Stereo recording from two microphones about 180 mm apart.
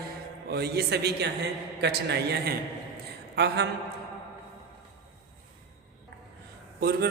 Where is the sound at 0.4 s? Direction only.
60° right (ahead or behind).